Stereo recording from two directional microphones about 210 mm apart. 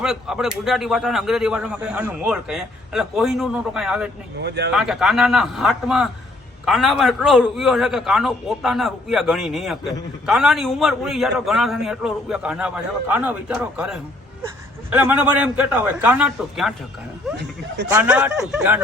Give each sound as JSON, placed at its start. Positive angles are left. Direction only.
{"t": 0.0, "sound": "a man's voice", "side_deg": 0}
{"t": 4.4, "sound": "speech", "side_deg": -55}
{"t": 4.7, "sound": "a man's voice", "side_deg": 0}
{"t": 17.9, "sound": "a man's voice", "side_deg": -5}